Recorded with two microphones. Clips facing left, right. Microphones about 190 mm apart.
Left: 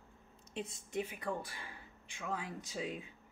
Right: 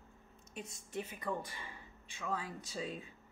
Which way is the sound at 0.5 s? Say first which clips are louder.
Left 4 dB; 25° left (ahead or behind).